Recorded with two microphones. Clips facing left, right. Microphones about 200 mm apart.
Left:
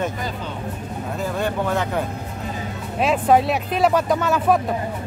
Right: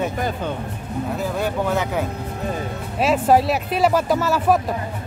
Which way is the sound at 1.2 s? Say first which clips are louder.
Left 1 dB; 10° right (ahead or behind).